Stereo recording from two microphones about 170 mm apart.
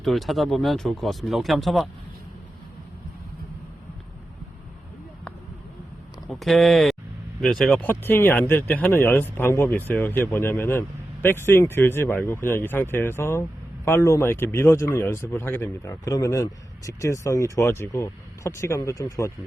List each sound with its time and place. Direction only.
0.0 s speech: centre (ahead or behind)
6.4 s speech: centre (ahead or behind); by 19.3 s 20° left (ahead or behind)